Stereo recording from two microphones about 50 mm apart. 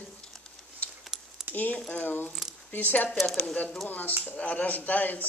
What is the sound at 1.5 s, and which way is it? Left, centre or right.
Speech, left.